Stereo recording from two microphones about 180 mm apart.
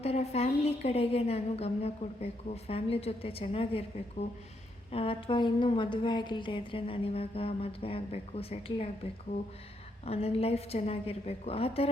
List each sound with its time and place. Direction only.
0.0 s a woman's voice: 35° left (ahead or behind)
10.1 s a woman's voice: 35° left (ahead or behind)